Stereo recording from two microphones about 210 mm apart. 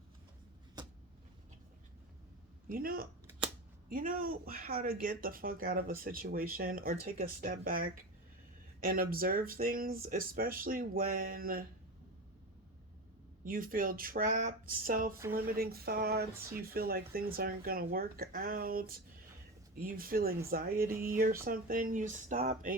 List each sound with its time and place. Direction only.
2.6 s speech: 45° right (ahead or behind)
13.4 s speech: 40° right (ahead or behind)